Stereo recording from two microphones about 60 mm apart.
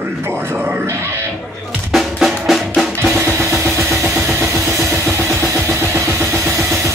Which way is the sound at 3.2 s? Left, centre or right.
Right.